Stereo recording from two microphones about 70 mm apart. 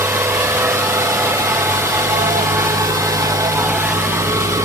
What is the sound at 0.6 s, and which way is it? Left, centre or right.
Vehicle, right.